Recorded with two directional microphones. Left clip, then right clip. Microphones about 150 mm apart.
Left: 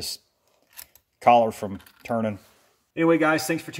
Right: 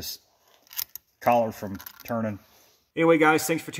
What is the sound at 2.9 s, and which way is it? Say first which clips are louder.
Speech: right 1 dB; 55° right (ahead or behind).